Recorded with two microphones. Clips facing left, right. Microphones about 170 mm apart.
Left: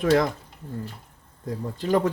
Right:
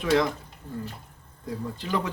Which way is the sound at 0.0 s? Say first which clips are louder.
Left 3 dB; 45° left (ahead or behind).